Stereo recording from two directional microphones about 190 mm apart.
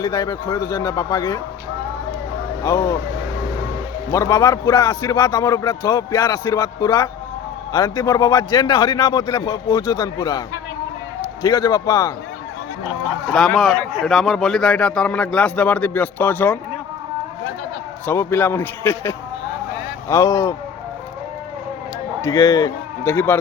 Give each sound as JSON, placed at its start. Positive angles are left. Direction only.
{"t": 0.0, "sound": "speech", "side_deg": 20}
{"t": 2.6, "sound": "speech", "side_deg": 15}
{"t": 4.1, "sound": "a man's voice", "side_deg": 15}
{"t": 13.3, "sound": "a man's voice", "side_deg": 0}
{"t": 18.0, "sound": "speech", "side_deg": 10}
{"t": 22.2, "sound": "a man's voice", "side_deg": 15}